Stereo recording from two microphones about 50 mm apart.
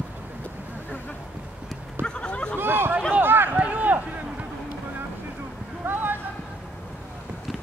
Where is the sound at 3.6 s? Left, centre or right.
Right.